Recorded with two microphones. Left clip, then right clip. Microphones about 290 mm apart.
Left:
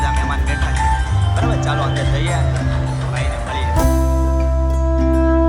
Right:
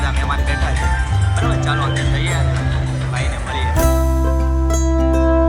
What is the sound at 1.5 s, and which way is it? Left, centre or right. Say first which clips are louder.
Speech: right 1 dB; centre.